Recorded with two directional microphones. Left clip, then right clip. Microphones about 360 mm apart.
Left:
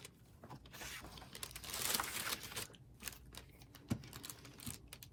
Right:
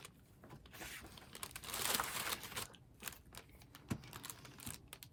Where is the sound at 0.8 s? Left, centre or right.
Centre.